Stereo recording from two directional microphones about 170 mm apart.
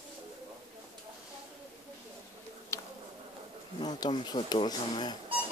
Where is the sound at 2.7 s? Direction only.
15° left (ahead or behind).